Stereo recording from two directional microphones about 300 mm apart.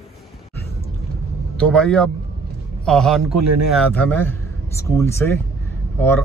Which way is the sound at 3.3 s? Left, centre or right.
Right.